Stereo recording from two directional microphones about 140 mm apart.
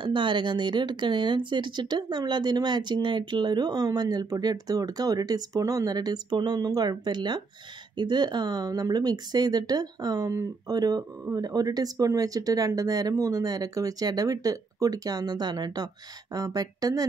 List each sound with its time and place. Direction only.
0.0 s speech: 35° right (ahead or behind)